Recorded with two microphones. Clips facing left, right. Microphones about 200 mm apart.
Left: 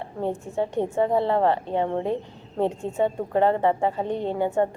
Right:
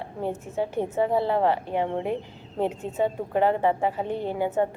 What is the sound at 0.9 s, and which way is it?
Speech, 5° right (ahead or behind).